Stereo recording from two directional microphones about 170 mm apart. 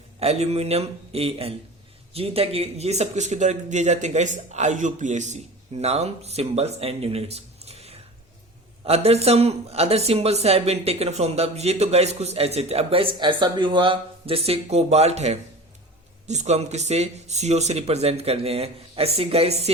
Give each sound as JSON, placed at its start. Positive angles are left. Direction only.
{"t": 0.2, "sound": "speech", "side_deg": -35}